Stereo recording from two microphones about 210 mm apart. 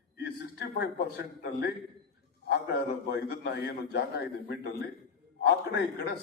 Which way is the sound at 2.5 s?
50° left (ahead or behind).